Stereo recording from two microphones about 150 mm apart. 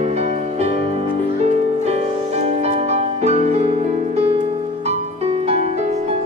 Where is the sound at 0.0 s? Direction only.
45° right (ahead or behind).